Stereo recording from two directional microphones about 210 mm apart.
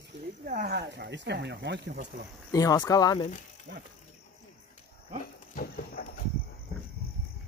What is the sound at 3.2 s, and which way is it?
Speech, 35° left (ahead or behind).